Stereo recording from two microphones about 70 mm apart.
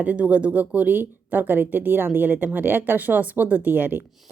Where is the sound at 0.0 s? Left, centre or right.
Right.